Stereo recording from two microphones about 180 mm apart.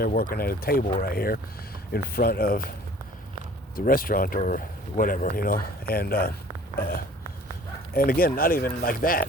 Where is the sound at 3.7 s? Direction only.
50° left (ahead or behind).